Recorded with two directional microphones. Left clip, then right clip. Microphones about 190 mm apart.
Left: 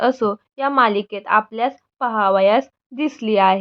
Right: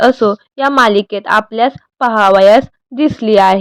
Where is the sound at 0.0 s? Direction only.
30° right (ahead or behind).